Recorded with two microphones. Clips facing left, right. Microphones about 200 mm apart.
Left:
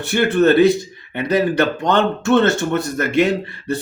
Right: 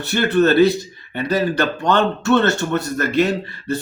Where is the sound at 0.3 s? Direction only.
20° left (ahead or behind).